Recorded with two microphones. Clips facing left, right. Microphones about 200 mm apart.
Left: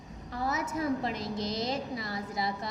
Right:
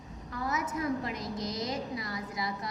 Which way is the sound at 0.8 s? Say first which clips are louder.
Left 2 dB; 30° left (ahead or behind).